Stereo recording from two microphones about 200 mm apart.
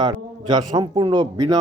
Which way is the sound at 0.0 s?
20° right (ahead or behind).